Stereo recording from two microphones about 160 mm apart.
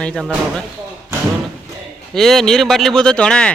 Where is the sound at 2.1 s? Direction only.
Centre (ahead or behind).